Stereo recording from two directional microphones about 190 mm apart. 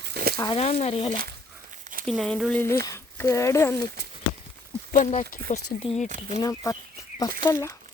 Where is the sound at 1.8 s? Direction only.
45° right (ahead or behind).